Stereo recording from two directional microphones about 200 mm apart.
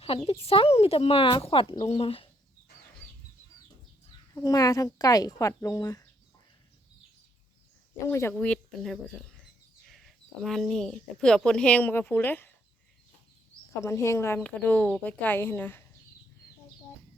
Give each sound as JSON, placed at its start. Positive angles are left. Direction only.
{"t": 0.3, "sound": "speech", "side_deg": 30}
{"t": 4.4, "sound": "speech", "side_deg": 20}
{"t": 8.0, "sound": "speech", "side_deg": 10}
{"t": 13.8, "sound": "speech", "side_deg": 15}